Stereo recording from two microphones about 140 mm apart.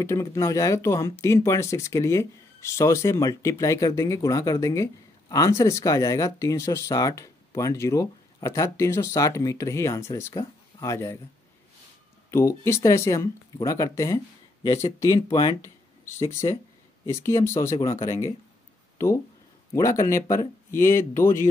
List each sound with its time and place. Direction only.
0.0 s speech: 20° left (ahead or behind)
12.3 s speech: 20° left (ahead or behind)
15.1 s speech: 40° left (ahead or behind)
16.3 s speech: 20° left (ahead or behind)
19.7 s speech: 25° left (ahead or behind)